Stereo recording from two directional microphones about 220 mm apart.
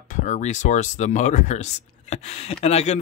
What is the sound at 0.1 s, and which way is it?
Speech, 35° left (ahead or behind).